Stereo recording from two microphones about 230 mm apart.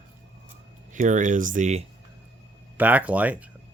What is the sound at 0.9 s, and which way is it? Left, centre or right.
Speech, right.